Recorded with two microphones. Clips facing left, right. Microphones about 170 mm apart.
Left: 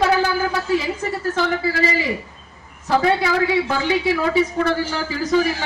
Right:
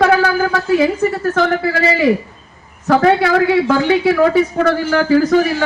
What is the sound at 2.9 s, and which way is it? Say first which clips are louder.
A man's voice: right 6 dB; 60° right (ahead or behind).